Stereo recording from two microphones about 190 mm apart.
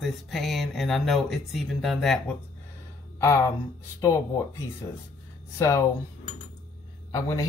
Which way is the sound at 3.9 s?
15° left (ahead or behind).